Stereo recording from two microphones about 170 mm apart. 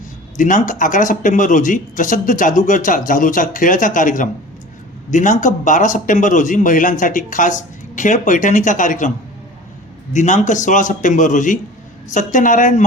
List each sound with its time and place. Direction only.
0.3 s speech: 50° left (ahead or behind)